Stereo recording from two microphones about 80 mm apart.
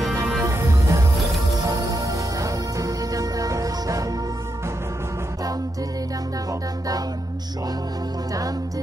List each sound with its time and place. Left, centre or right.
0.4 s music: right
1.6 s music: right